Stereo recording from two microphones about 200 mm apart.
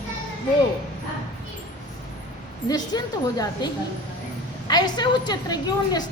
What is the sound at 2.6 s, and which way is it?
A woman's voice, 20° left (ahead or behind).